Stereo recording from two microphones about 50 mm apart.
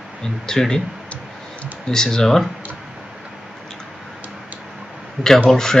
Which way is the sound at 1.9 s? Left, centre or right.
Centre.